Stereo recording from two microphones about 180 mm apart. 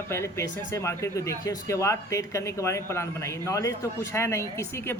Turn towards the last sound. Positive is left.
turn(degrees=15)  # may be behind; listen again after turning